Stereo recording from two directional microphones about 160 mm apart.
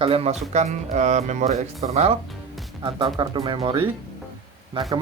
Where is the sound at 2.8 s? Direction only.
30° right (ahead or behind).